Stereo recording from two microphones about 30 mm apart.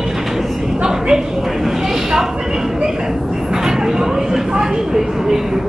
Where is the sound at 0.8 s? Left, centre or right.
Right.